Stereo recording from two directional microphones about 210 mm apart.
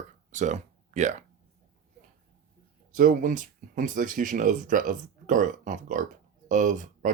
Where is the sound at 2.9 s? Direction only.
40° right (ahead or behind).